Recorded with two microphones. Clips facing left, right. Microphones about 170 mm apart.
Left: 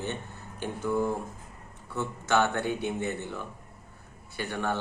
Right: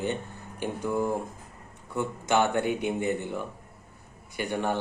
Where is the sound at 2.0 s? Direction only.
15° right (ahead or behind).